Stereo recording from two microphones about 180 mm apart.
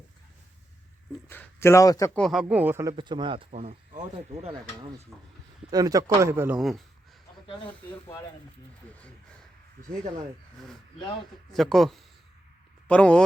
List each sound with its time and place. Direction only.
1.3 s speech: 10° left (ahead or behind)
2.1 s speech: centre (ahead or behind)
2.9 s speech: 25° right (ahead or behind)
5.1 s speech: centre (ahead or behind)
5.7 s speech: 20° right (ahead or behind)
6.6 s speech: centre (ahead or behind)
7.4 s speech: 25° left (ahead or behind)
11.5 s speech: centre (ahead or behind)